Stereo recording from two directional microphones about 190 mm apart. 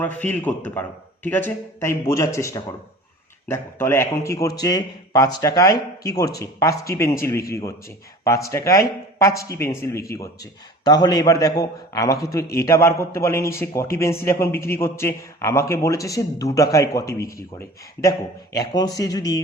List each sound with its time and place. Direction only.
0.0 s a man's voice: 10° left (ahead or behind)
18.5 s speech: 20° left (ahead or behind)